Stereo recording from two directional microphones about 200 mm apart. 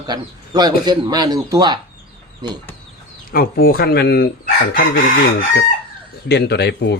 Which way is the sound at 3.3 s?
50° left (ahead or behind).